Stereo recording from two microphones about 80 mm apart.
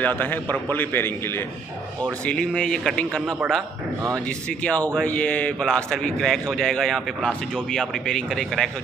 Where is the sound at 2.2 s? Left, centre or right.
Centre.